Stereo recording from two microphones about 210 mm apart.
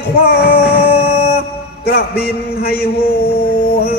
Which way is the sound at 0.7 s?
25° left (ahead or behind).